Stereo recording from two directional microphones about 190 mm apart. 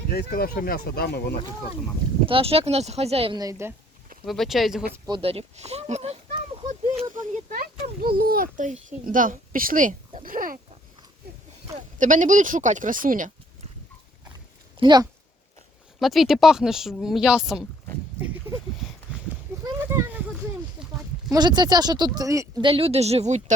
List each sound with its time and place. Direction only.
0.1 s speech: 55° left (ahead or behind)
2.2 s speech: 30° right (ahead or behind)
4.3 s speech: centre (ahead or behind)
5.0 s speech: 25° right (ahead or behind)
7.1 s a child's voice: 45° right (ahead or behind)
11.9 s a child's voice: 45° right (ahead or behind)
14.8 s speech: 25° right (ahead or behind)
16.0 s speech: centre (ahead or behind)
19.6 s a sound: 15° right (ahead or behind)
21.3 s speech: 20° right (ahead or behind)
22.6 s speech: 30° right (ahead or behind)